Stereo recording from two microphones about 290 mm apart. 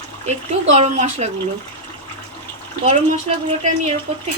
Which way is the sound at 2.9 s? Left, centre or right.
Right.